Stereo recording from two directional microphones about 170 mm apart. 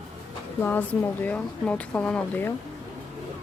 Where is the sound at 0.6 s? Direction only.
10° left (ahead or behind).